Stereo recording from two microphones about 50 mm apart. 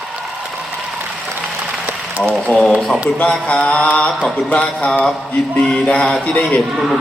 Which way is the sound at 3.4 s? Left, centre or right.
Left.